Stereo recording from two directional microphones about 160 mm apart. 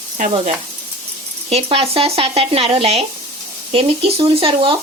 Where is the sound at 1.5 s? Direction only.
40° right (ahead or behind).